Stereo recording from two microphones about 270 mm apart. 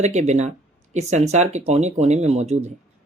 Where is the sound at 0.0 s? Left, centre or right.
Right.